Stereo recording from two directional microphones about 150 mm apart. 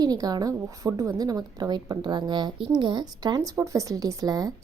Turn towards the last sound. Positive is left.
turn(degrees=-25)  # may be behind; listen again after turning